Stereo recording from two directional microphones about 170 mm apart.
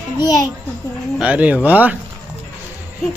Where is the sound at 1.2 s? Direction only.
10° right (ahead or behind).